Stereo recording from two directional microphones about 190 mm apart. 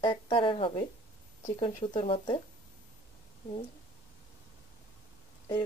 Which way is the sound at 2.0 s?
25° left (ahead or behind).